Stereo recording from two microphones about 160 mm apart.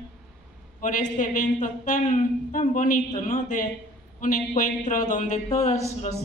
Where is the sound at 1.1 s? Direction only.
50° left (ahead or behind).